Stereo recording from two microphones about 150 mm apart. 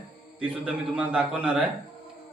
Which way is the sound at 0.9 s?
5° right (ahead or behind).